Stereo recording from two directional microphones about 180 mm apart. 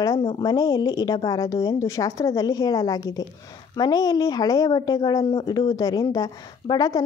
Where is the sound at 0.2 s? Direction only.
25° left (ahead or behind).